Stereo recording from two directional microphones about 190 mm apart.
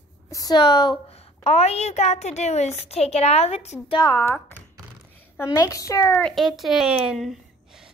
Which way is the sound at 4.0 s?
20° left (ahead or behind).